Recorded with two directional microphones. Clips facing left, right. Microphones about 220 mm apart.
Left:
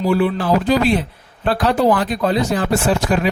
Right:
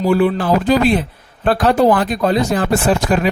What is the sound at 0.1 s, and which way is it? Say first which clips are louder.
A man's voice: right 2 dB; 50° right (ahead or behind).